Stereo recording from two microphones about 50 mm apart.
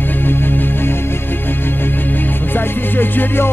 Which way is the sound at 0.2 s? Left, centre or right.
Left.